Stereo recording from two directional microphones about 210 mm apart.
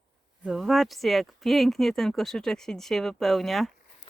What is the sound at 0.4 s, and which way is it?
Speech, centre (ahead or behind).